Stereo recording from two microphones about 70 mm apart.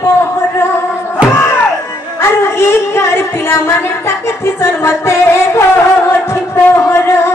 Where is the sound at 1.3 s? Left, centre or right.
Left.